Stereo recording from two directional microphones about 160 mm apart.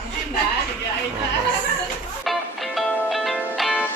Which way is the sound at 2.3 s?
Centre (ahead or behind).